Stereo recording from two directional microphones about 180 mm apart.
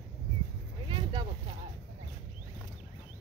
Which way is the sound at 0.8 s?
25° right (ahead or behind).